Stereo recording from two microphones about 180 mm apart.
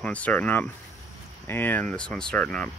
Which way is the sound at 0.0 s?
10° left (ahead or behind).